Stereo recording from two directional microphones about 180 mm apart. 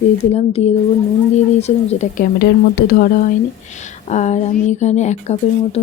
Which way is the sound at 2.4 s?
55° left (ahead or behind).